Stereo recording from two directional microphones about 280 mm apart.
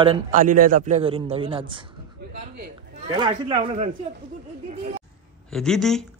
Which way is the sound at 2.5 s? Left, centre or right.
Right.